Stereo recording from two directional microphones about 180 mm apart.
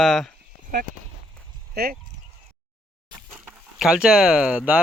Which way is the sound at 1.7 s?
60° right (ahead or behind).